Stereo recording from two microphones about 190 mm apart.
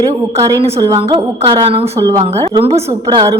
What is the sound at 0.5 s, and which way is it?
A woman's voice, 20° right (ahead or behind).